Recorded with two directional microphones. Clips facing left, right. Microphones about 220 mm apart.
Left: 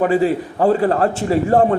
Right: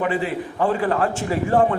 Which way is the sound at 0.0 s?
40° left (ahead or behind).